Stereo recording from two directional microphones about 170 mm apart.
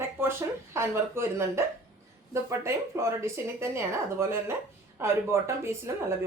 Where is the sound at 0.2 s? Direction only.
15° right (ahead or behind).